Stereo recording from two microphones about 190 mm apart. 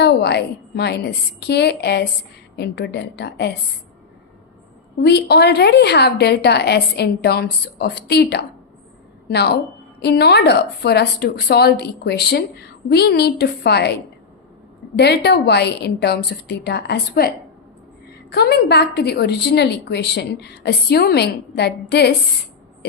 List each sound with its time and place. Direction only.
0.0 s a woman's voice: 60° left (ahead or behind)
5.0 s a woman's voice: 60° left (ahead or behind)
14.9 s a woman's voice: 60° left (ahead or behind)